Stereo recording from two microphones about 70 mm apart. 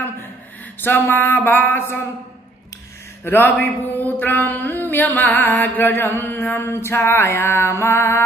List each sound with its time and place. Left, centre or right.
0.7 s mantra: left
3.3 s a sound: left
5.6 s mantra: left